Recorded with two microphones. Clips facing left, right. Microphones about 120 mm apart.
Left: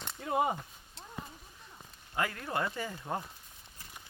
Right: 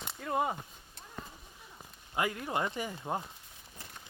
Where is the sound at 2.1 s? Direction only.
15° right (ahead or behind).